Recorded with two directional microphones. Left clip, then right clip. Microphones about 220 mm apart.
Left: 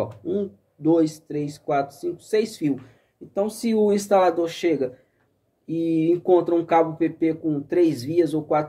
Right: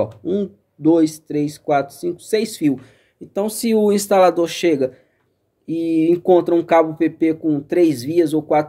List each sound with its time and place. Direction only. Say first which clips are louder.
0.0 s speech: right 5 dB; 45° right (ahead or behind)